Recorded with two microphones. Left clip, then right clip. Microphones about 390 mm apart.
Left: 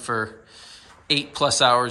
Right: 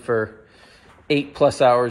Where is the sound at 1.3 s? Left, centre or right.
Centre.